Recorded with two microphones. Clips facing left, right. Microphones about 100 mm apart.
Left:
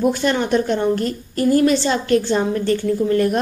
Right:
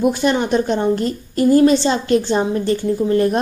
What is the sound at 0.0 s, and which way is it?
A woman's voice, 15° right (ahead or behind).